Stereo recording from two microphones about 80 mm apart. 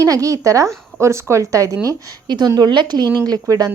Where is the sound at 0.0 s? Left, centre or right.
Right.